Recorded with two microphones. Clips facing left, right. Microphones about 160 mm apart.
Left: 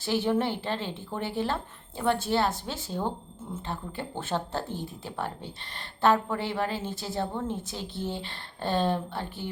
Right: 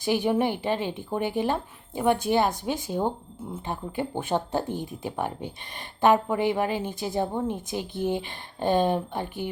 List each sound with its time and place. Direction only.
0.0 s a woman's voice: 15° right (ahead or behind)